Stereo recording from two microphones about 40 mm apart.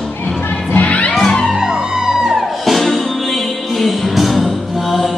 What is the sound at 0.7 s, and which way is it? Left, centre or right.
Music, left.